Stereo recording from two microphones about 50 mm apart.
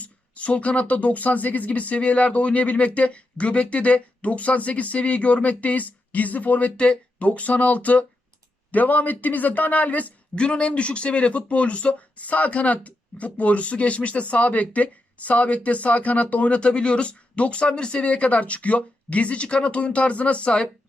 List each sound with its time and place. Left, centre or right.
0.0 s speech: left
10.3 s speech: left